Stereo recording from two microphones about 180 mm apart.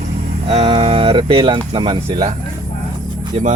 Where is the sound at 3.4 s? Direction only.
35° right (ahead or behind).